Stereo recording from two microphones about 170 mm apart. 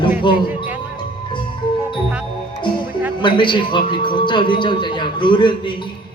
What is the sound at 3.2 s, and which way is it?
A man's voice, 30° left (ahead or behind).